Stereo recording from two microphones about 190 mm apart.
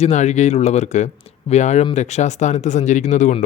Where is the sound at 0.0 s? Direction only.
35° left (ahead or behind).